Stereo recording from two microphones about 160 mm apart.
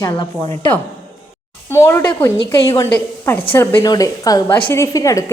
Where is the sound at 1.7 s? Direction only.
15° left (ahead or behind).